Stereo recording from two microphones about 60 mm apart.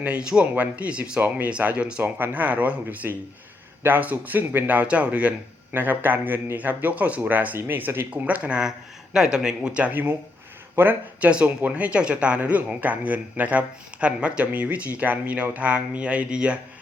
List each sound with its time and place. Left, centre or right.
0.0 s speech: right
5.7 s a man's voice: right
8.1 s a man's voice: right
10.8 s a man's voice: right
11.2 s speech: centre